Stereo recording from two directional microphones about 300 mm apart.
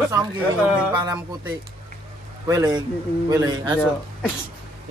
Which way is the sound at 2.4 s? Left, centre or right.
Centre.